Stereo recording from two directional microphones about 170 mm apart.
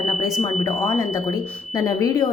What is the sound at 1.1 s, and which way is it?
A woman's voice, 20° left (ahead or behind).